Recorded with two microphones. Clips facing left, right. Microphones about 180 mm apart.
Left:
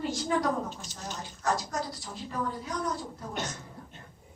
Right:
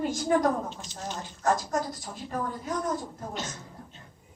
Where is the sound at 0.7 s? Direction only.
45° left (ahead or behind).